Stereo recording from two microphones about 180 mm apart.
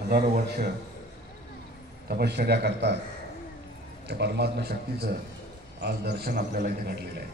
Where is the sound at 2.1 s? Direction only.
65° right (ahead or behind).